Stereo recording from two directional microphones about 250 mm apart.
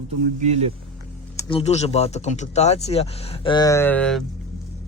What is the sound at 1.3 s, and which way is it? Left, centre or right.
Speech, left.